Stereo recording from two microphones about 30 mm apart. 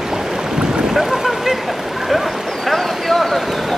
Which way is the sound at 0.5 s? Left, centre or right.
Right.